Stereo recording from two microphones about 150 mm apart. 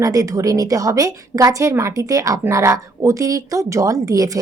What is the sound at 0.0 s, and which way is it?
A woman's voice, 20° right (ahead or behind).